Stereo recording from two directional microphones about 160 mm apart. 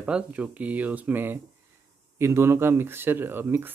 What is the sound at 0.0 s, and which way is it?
Speech, 10° right (ahead or behind).